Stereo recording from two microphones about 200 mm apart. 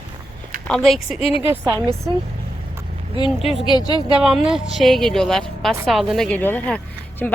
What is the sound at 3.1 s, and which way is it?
Speech, 30° left (ahead or behind).